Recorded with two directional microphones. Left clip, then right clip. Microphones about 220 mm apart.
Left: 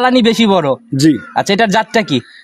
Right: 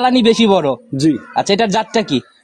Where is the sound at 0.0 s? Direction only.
40° left (ahead or behind).